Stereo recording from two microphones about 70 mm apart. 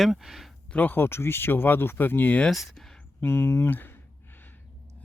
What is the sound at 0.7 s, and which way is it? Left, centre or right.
Speech, left.